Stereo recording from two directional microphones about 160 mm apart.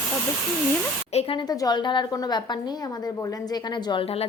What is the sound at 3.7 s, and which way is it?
Speech, 30° left (ahead or behind).